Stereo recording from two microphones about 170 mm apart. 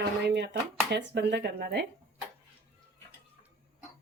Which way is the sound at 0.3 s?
80° right.